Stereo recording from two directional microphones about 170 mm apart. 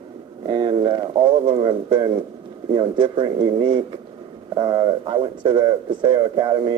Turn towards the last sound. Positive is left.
turn(degrees=-25)  # may be behind; listen again after turning